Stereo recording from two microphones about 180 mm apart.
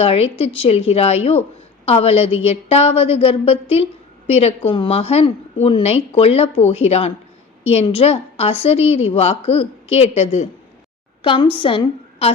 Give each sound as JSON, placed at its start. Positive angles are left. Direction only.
{"t": 0.0, "sound": "a woman's voice", "side_deg": 30}